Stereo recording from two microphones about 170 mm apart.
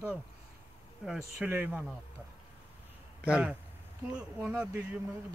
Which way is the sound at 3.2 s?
5° right (ahead or behind).